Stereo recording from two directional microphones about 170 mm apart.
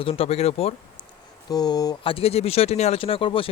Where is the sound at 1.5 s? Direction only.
25° left (ahead or behind).